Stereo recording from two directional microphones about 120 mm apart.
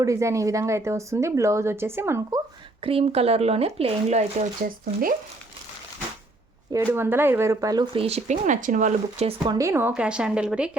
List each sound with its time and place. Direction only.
0.0 s a woman's voice: 25° right (ahead or behind)
2.8 s speech: 55° right (ahead or behind)
4.9 s speech: 55° right (ahead or behind)
6.9 s a woman's voice: 20° right (ahead or behind)
7.9 s speech: 60° right (ahead or behind); by 9.3 s 75° right (ahead or behind)
9.4 s a woman's voice: 30° right (ahead or behind)
9.9 s speech: 10° right (ahead or behind)